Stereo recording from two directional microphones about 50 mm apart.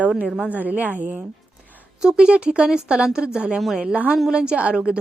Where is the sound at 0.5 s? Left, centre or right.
Right.